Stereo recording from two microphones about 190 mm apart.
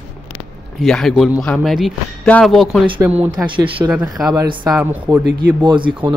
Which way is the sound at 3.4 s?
25° right (ahead or behind).